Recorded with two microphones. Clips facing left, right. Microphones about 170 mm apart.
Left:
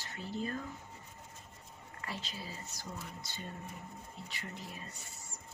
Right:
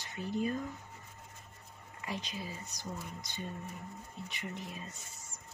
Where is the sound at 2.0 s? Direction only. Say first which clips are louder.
Right 3 dB; 15° right (ahead or behind).